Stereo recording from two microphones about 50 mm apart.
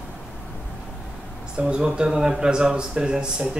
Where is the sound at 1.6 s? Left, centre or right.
Centre.